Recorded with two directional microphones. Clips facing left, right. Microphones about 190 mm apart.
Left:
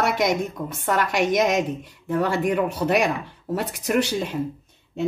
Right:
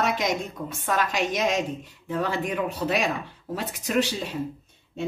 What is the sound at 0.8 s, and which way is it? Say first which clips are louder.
A woman's voice: left 4 dB; 65° left (ahead or behind).